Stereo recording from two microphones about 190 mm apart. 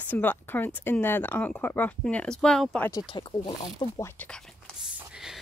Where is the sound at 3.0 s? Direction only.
25° left (ahead or behind).